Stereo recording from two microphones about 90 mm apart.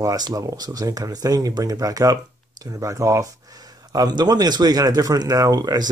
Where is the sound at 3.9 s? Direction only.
45° right (ahead or behind).